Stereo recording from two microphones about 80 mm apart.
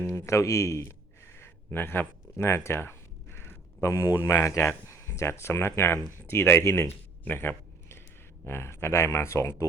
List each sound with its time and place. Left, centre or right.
0.1 s speech: left